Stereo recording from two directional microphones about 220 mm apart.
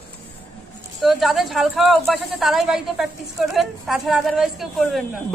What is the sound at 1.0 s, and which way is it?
A woman's voice, centre (ahead or behind).